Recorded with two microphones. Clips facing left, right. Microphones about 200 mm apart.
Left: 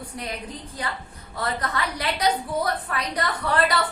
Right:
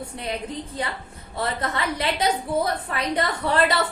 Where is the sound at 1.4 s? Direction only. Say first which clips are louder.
Right 1 dB; 25° right (ahead or behind).